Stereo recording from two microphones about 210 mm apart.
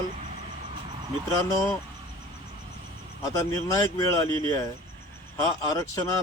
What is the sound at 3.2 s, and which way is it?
Speech, 15° left (ahead or behind).